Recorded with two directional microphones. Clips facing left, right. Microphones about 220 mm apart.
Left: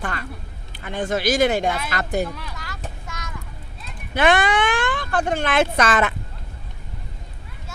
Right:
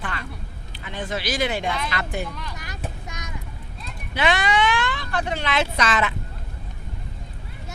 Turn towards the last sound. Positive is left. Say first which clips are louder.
# left 4 dB
turn(degrees=50)  # may be behind; listen again after turning